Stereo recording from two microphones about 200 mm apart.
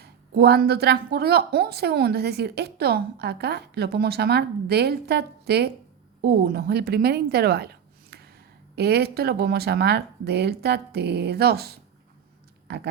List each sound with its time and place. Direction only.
0.0 s a woman's voice: 55° right (ahead or behind)